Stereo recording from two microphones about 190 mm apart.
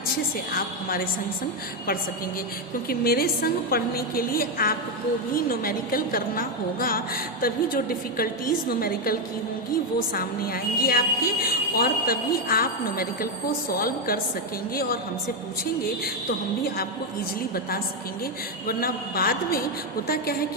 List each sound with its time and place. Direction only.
0.5 s a woman's voice: 50° left (ahead or behind)
2.9 s a woman's voice: 50° left (ahead or behind)
10.2 s a woman's voice: 50° left (ahead or behind)
18.7 s a woman's voice: 50° left (ahead or behind)